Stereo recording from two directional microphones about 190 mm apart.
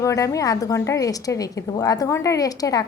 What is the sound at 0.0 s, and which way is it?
A woman's voice, 15° left (ahead or behind).